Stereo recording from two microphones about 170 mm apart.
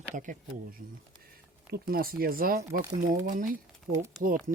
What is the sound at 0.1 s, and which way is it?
Speech, 50° right (ahead or behind).